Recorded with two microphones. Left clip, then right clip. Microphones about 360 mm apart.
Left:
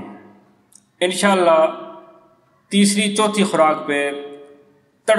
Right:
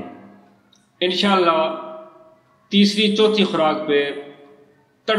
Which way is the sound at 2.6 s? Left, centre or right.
Centre.